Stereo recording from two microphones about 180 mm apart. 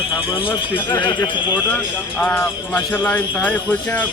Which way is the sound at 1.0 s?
25° left (ahead or behind).